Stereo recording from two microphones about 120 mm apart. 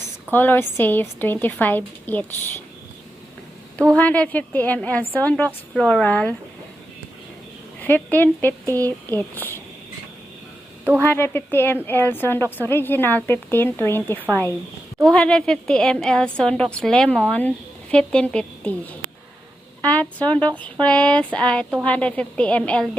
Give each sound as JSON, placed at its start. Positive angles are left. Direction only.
{"t": 0.3, "sound": "a woman's voice", "side_deg": 15}
{"t": 3.9, "sound": "a woman's voice", "side_deg": 10}
{"t": 7.8, "sound": "a woman's voice", "side_deg": 15}
{"t": 11.0, "sound": "a woman's voice", "side_deg": 20}
{"t": 15.0, "sound": "a woman's voice", "side_deg": 5}
{"t": 19.8, "sound": "a woman's voice", "side_deg": 10}